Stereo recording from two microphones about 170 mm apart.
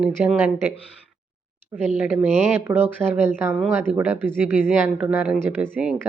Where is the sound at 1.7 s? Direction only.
10° right (ahead or behind).